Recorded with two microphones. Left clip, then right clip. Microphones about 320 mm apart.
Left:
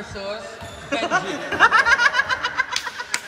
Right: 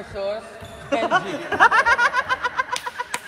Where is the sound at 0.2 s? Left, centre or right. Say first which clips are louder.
Right 5 dB; right.